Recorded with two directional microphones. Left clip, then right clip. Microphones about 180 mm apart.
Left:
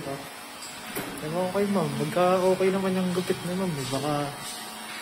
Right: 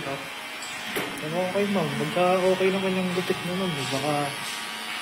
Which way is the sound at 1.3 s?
15° left (ahead or behind).